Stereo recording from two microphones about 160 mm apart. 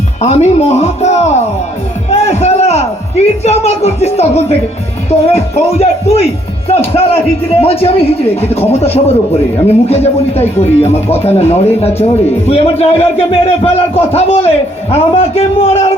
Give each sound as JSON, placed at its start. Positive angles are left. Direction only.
{"t": 0.2, "sound": "a man's voice", "side_deg": 40}